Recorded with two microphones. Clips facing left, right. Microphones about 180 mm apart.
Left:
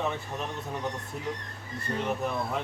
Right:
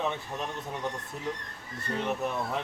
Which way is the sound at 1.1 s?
Centre (ahead or behind).